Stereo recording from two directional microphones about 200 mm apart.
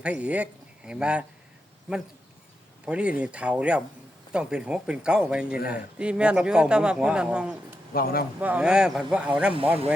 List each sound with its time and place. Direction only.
0.0 s a man's voice: 5° right (ahead or behind)
2.8 s a man's voice: 5° right (ahead or behind)
5.5 s speech: 45° left (ahead or behind)
6.0 s a man's voice: 5° right (ahead or behind)
7.9 s speech: 50° left (ahead or behind)
8.4 s a man's voice: 5° right (ahead or behind)